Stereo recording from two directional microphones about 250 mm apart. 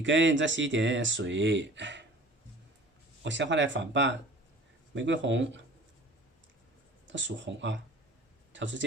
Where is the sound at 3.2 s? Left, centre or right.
Right.